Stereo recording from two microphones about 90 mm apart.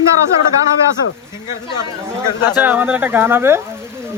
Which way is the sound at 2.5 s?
20° right (ahead or behind).